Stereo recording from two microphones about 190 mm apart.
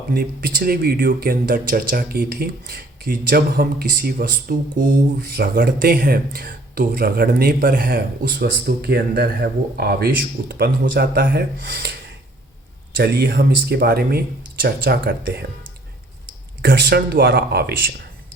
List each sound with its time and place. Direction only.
0.1 s speech: 50° right (ahead or behind)
13.0 s speech: 55° right (ahead or behind)
16.6 s speech: 55° right (ahead or behind)